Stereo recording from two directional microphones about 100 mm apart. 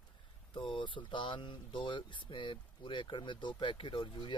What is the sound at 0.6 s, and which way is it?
Speech, 55° left (ahead or behind).